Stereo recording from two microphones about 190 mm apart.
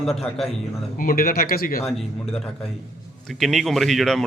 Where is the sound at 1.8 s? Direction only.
Centre (ahead or behind).